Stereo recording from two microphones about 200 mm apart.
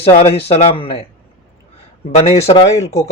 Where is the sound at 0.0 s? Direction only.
30° left (ahead or behind).